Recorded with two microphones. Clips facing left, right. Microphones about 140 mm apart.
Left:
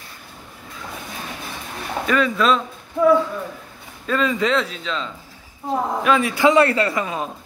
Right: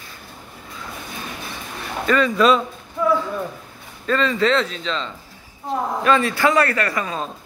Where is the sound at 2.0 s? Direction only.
5° left (ahead or behind).